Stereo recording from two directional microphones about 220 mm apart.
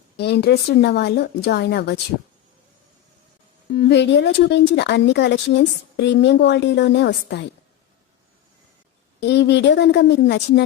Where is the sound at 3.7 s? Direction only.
50° left (ahead or behind).